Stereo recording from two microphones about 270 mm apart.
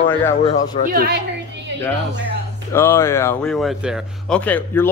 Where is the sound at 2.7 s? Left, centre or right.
Centre.